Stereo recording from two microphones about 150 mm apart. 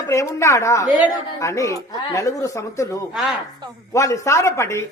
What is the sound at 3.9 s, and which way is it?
Speech, 20° left (ahead or behind).